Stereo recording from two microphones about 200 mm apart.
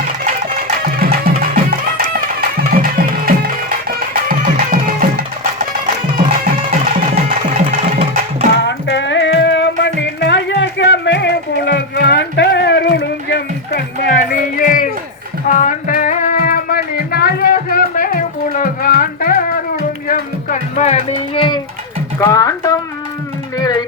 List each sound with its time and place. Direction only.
0.9 s music: 45° right (ahead or behind)
6.6 s music: 35° right (ahead or behind)
8.6 s music: 65° left (ahead or behind); by 19.5 s 45° left (ahead or behind)
20.1 s a sound: 40° left (ahead or behind); by 22.8 s 15° left (ahead or behind)
23.6 s music: 20° left (ahead or behind)